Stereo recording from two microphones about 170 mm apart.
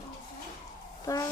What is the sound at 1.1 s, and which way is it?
Speech, 20° left (ahead or behind).